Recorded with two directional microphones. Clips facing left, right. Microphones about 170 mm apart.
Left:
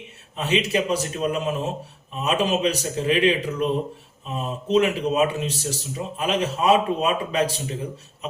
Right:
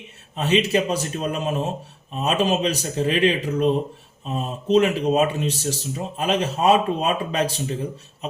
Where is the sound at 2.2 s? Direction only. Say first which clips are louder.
Right 1 dB; 30° right (ahead or behind).